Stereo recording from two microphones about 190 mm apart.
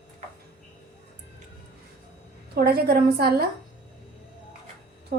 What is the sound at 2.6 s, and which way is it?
Speech, 55° right (ahead or behind).